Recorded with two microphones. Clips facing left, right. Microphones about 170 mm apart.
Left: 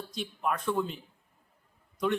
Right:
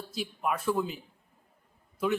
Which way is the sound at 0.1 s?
5° right (ahead or behind).